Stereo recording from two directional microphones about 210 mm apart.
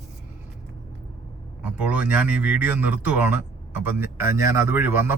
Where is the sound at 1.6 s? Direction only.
5° right (ahead or behind).